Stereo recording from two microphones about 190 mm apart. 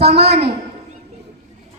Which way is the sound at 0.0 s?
60° right (ahead or behind).